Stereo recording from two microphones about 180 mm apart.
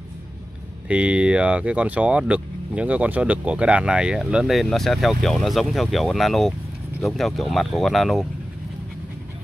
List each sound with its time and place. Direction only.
0.8 s speech: 5° right (ahead or behind)